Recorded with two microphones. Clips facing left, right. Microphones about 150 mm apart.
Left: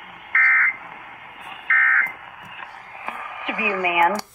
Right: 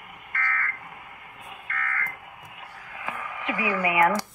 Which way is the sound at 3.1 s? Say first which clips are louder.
Left 1 dB; 20° left (ahead or behind).